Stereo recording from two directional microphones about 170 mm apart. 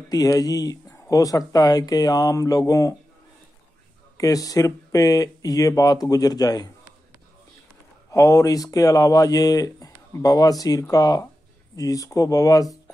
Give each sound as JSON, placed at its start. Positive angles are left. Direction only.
{"t": 0.1, "sound": "speech", "side_deg": 20}
{"t": 4.2, "sound": "speech", "side_deg": 20}
{"t": 8.1, "sound": "speech", "side_deg": 20}